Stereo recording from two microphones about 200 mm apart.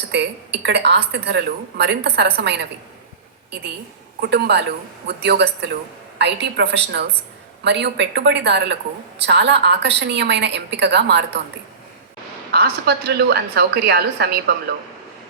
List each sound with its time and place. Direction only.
0.1 s a woman's voice: 60° right (ahead or behind)
4.2 s a woman's voice: 55° right (ahead or behind)
12.5 s a woman's voice: 55° right (ahead or behind)